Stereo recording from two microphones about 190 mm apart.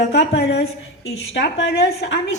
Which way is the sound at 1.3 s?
70° left (ahead or behind).